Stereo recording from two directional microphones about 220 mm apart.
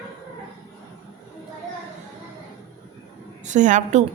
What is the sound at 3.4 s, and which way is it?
Speech, 35° right (ahead or behind).